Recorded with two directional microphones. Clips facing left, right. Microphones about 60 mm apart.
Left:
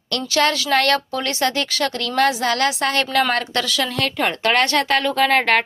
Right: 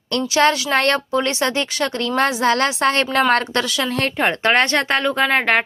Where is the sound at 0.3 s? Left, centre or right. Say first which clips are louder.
Right 1 dB; right.